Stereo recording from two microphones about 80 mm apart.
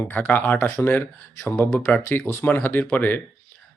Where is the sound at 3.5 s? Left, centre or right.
Left.